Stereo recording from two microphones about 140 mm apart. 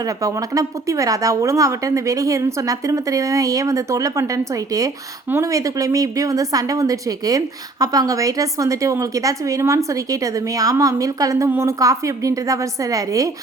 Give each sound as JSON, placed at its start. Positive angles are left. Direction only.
{"t": 0.0, "sound": "a woman's voice", "side_deg": -25}